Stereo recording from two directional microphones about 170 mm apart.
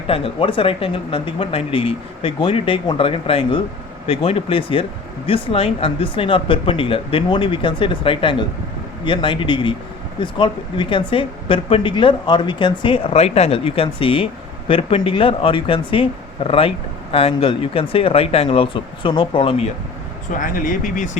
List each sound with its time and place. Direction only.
0.1 s speech: 30° left (ahead or behind)
20.4 s speech: 55° left (ahead or behind)